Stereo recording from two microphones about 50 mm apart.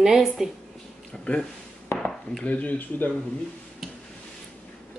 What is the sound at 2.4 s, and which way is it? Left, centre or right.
Speech, left.